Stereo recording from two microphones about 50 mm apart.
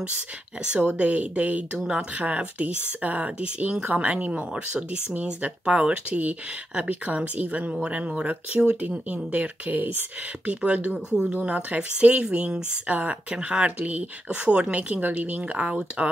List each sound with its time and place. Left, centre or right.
0.7 s speech: right
1.8 s speech: centre
2.1 s speech: right
9.1 s speech: right
10.5 s speech: right